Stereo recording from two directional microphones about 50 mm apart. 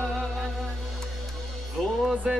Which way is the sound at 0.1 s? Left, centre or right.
Centre.